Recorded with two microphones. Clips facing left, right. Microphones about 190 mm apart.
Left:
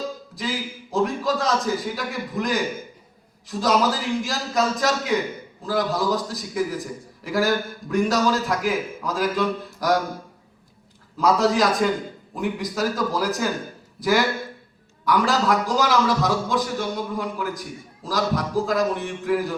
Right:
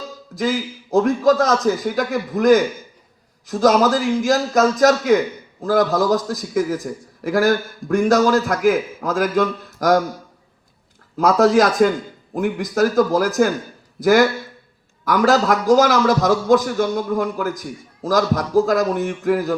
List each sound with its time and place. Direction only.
0.3 s a man's voice: 45° right (ahead or behind)
11.2 s a man's voice: 45° right (ahead or behind)